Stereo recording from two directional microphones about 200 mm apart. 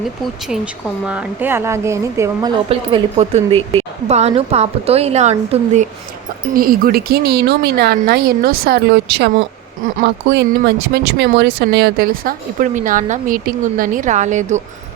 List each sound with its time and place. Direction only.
0.4 s speech: 5° right (ahead or behind)
2.6 s a woman's voice: 30° right (ahead or behind)
6.5 s speech: 45° right (ahead or behind)